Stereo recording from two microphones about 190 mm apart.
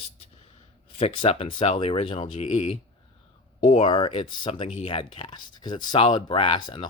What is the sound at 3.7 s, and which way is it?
Speech, 25° left (ahead or behind).